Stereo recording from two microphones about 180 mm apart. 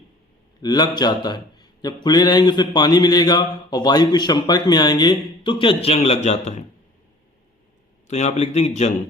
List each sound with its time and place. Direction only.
0.6 s speech: 20° left (ahead or behind); by 6.6 s 40° left (ahead or behind)
8.0 s speech: 40° left (ahead or behind)